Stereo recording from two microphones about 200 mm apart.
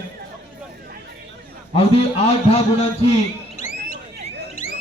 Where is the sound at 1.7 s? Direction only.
30° left (ahead or behind).